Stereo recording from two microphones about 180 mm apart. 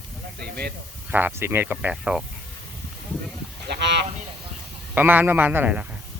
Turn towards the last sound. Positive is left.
turn(degrees=-10)  # may be behind; listen again after turning